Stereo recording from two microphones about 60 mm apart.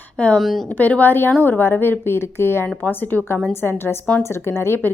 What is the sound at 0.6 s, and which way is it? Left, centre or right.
A woman's voice, left.